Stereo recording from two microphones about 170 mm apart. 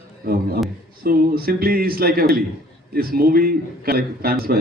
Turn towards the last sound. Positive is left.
turn(degrees=-65)  # may be behind; listen again after turning